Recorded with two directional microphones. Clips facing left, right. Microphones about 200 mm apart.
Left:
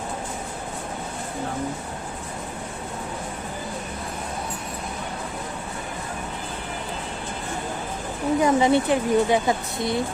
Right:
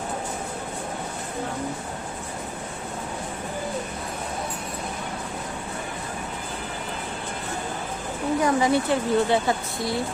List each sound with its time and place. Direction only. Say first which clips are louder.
8.4 s speech: left 3 dB; 25° left (ahead or behind)